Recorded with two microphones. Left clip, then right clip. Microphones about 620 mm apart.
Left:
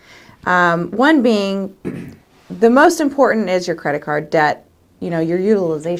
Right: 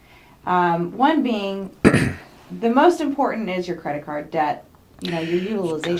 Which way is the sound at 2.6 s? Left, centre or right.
Left.